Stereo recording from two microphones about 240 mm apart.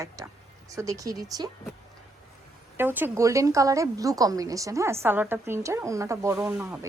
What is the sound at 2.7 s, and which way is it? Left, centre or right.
A woman's voice, centre.